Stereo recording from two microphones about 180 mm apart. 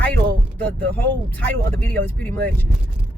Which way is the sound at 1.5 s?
10° left (ahead or behind).